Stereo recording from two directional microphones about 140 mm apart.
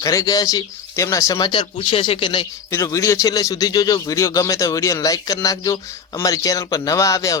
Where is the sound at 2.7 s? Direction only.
20° left (ahead or behind).